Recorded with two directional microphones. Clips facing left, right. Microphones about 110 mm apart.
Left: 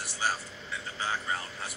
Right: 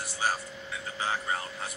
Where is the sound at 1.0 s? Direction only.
20° right (ahead or behind).